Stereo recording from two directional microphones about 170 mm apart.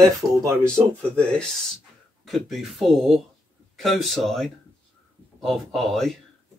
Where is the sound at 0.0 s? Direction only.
25° right (ahead or behind).